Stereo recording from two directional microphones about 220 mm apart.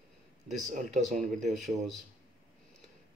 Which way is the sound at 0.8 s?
35° right (ahead or behind).